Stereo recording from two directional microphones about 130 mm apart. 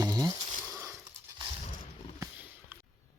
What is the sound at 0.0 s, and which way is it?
Insect, 30° right (ahead or behind).